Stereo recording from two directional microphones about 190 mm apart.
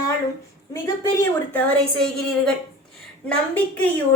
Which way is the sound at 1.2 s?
5° left (ahead or behind).